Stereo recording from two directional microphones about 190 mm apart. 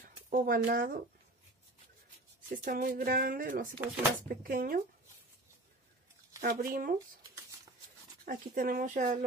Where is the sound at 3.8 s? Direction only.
5° right (ahead or behind).